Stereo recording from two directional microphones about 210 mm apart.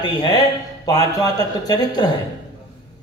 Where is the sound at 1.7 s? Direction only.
20° left (ahead or behind).